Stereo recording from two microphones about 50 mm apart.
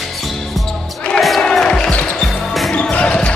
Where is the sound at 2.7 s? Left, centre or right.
Left.